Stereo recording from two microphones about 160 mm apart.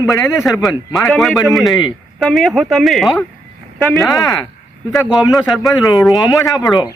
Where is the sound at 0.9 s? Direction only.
Centre (ahead or behind).